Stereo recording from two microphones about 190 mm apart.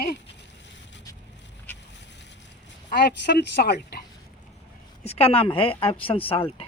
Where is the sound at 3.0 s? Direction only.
60° left (ahead or behind).